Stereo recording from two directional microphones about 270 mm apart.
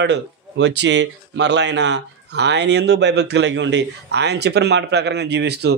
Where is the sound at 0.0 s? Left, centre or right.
Right.